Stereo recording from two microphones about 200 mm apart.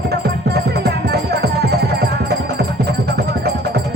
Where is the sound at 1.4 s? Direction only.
55° right (ahead or behind).